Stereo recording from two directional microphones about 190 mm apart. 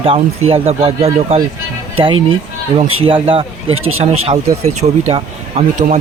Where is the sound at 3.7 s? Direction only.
90° right.